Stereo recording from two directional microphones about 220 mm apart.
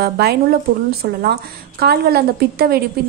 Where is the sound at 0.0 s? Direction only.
45° right (ahead or behind).